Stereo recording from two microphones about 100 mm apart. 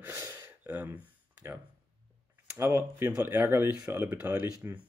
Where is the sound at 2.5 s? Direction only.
25° right (ahead or behind).